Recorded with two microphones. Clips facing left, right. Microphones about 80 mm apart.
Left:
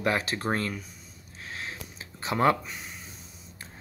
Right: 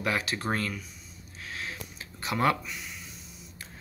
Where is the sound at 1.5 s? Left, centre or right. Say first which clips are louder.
Even; left.